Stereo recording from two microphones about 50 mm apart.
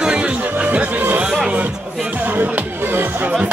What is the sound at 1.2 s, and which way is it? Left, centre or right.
Music, centre.